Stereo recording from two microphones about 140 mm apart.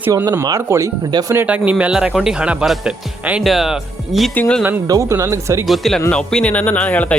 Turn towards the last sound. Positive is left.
turn(degrees=10)  # may be behind; listen again after turning